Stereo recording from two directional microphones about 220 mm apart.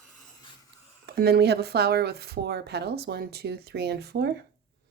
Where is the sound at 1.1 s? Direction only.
45° right (ahead or behind).